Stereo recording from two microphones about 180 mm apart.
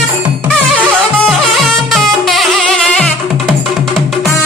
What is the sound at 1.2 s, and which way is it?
Music, centre (ahead or behind).